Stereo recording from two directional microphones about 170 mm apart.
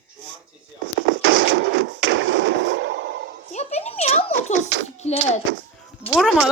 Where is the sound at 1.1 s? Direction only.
90° right.